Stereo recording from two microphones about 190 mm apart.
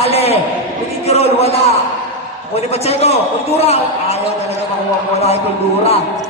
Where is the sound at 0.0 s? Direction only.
30° left (ahead or behind).